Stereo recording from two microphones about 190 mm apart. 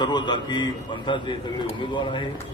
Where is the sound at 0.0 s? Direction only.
25° left (ahead or behind).